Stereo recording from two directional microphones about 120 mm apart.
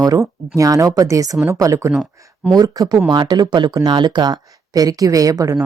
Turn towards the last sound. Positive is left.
turn(degrees=-30)  # may be behind; listen again after turning